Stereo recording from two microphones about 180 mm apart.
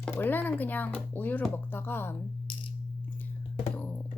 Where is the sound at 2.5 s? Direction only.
30° left (ahead or behind).